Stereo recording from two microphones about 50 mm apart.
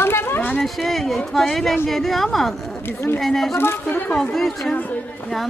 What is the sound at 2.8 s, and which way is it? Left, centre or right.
Speech, left.